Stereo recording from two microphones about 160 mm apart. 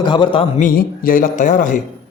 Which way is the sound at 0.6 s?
60° left (ahead or behind).